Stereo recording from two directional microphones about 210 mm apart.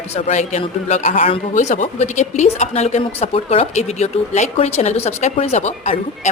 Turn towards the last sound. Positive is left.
turn(degrees=30)  # may be behind; listen again after turning